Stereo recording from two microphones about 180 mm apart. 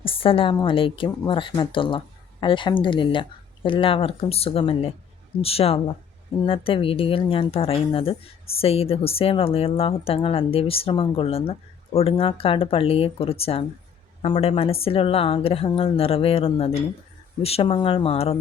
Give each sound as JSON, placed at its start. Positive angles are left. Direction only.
{"t": 0.0, "sound": "a woman's voice", "side_deg": 30}